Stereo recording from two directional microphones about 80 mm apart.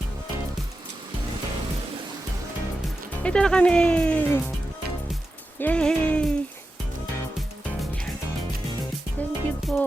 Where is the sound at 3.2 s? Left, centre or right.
Centre.